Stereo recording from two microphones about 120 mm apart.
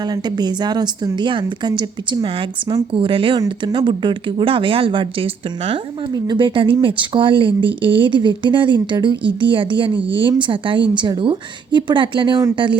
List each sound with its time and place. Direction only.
0.0 s a woman's voice: 35° right (ahead or behind)